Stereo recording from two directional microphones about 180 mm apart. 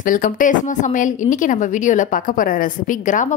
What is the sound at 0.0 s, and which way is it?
Speech, 50° left (ahead or behind).